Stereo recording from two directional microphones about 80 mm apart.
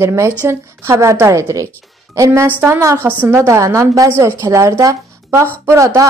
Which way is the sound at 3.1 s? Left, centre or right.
Right.